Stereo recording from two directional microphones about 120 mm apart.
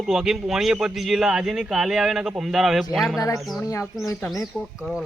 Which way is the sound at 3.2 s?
25° left (ahead or behind).